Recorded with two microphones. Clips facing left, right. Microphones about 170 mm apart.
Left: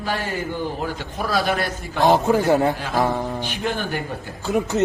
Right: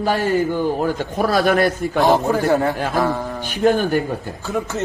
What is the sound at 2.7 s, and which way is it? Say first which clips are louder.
A man's voice: right 2 dB; 45° right (ahead or behind).